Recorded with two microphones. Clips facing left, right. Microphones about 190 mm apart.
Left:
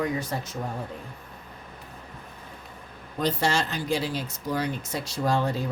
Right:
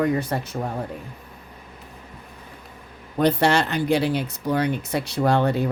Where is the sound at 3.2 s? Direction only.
65° right (ahead or behind).